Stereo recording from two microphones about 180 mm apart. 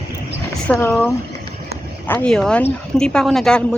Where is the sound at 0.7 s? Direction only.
10° left (ahead or behind).